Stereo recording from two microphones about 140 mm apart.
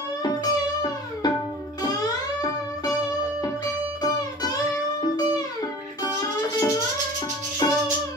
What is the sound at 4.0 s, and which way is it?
Music, 25° left (ahead or behind).